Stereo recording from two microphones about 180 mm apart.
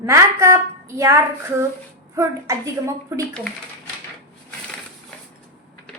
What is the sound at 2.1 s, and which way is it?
A woman's voice, 15° right (ahead or behind).